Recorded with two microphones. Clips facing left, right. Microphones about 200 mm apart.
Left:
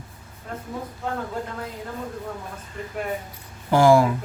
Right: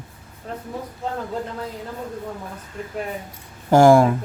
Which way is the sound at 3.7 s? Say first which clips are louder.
Right 3 dB; 50° right (ahead or behind).